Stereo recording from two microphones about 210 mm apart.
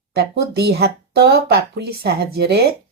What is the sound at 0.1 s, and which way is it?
Speech, 50° right (ahead or behind).